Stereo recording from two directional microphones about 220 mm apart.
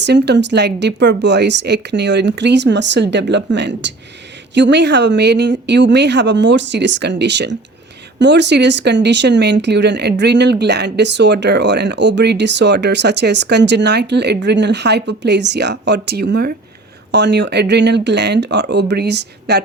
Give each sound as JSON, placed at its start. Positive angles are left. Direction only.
{"t": 0.0, "sound": "speech", "side_deg": -50}